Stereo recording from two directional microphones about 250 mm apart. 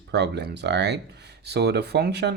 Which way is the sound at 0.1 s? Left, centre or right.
Right.